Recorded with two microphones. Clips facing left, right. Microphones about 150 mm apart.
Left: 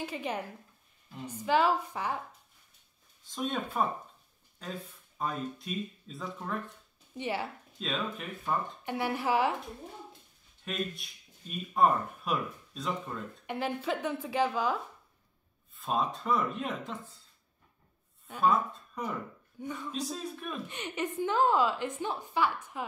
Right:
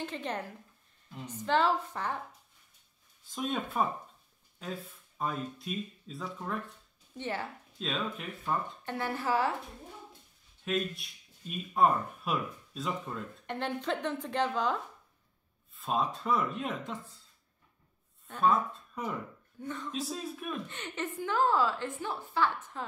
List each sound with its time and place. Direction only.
0.0 s a woman's voice: 10° left (ahead or behind)
3.8 s speech: centre (ahead or behind)
7.2 s a woman's voice: 10° left (ahead or behind)
7.8 s speech: centre (ahead or behind)
8.8 s a woman's voice: 15° left (ahead or behind)
10.6 s a woman's voice: centre (ahead or behind)
18.2 s a sound: 5° left (ahead or behind)
19.6 s a woman's voice: 10° left (ahead or behind)
19.9 s speech: centre (ahead or behind)
20.6 s a woman's voice: 15° left (ahead or behind)